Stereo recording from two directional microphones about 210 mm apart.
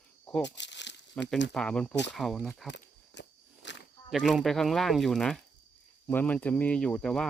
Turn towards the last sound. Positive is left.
turn(degrees=5)  # may be behind; listen again after turning